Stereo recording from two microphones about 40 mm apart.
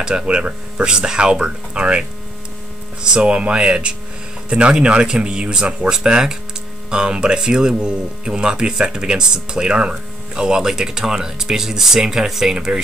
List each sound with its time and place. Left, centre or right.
0.0 s speech: right